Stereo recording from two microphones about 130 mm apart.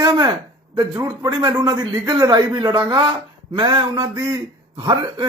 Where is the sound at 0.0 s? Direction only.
30° right (ahead or behind).